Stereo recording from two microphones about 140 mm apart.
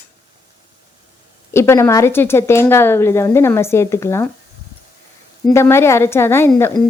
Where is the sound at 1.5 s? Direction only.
20° left (ahead or behind).